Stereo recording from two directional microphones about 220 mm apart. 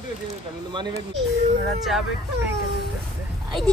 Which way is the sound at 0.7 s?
20° right (ahead or behind).